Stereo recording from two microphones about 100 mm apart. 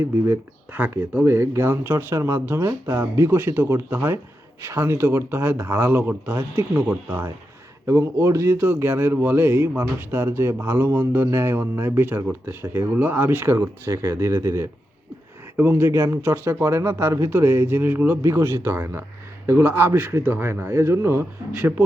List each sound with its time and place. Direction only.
0.0 s a man's voice: 20° right (ahead or behind)